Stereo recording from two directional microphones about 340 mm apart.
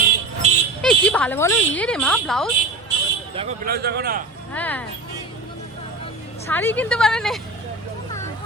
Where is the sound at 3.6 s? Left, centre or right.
Right.